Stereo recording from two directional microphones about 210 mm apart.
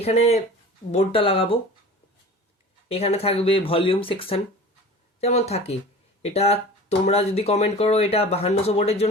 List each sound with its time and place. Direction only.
0.0 s speech: 30° left (ahead or behind)
2.9 s speech: 30° left (ahead or behind)